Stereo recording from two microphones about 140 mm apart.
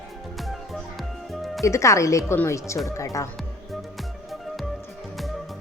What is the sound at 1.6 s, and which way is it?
Speech, 20° left (ahead or behind).